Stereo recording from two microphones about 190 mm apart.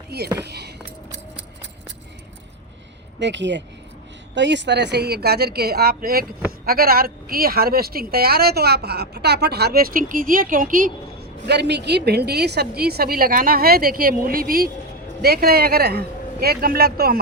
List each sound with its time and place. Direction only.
0.1 s a woman's voice: 55° right (ahead or behind)
3.2 s a woman's voice: 70° right (ahead or behind); by 17.2 s 50° right (ahead or behind)